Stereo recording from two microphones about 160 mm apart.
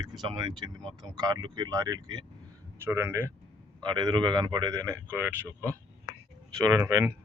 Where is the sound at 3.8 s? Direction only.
25° right (ahead or behind).